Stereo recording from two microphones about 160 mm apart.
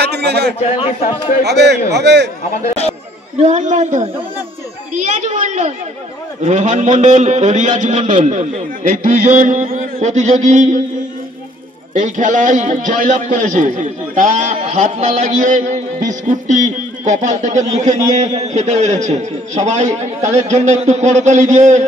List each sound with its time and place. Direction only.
0.0 s a sound: 90° right
0.6 s a man's voice: 35° left (ahead or behind)
1.4 s a man's voice: 90° right
2.5 s a man's voice: 40° left (ahead or behind)
3.4 s a man's voice: 50° right (ahead or behind)
11.9 s a man's voice: 50° right (ahead or behind)